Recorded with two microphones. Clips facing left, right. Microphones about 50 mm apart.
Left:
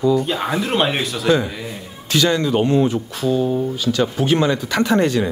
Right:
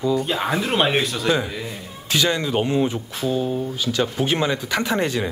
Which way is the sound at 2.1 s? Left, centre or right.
Centre.